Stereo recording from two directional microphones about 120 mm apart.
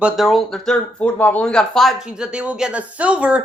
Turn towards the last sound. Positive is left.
turn(degrees=-10)  # may be behind; listen again after turning